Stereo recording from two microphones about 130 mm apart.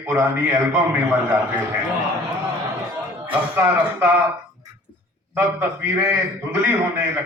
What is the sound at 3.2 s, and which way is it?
Speech, 15° right (ahead or behind).